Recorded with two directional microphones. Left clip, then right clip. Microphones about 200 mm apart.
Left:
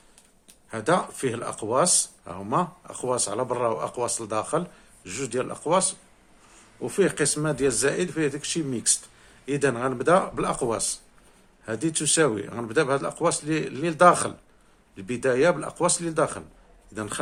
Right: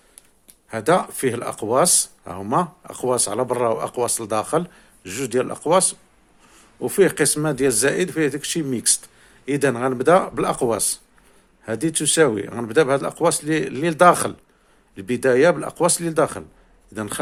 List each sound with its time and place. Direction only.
0.7 s speech: 40° right (ahead or behind)